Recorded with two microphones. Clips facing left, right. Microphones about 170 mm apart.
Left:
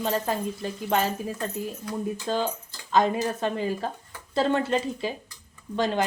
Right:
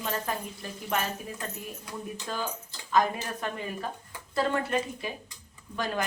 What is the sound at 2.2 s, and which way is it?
Speech, 30° left (ahead or behind).